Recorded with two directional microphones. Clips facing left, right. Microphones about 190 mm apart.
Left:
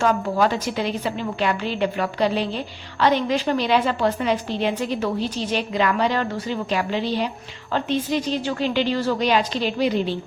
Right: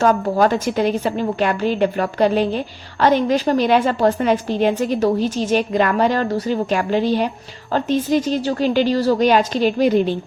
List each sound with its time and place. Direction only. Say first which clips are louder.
0.0 s a woman's voice: right 4 dB; 45° right (ahead or behind)